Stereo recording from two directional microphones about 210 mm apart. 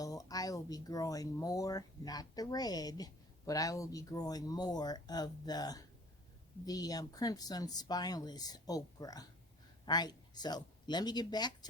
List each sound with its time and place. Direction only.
0.0 s speech: 15° left (ahead or behind)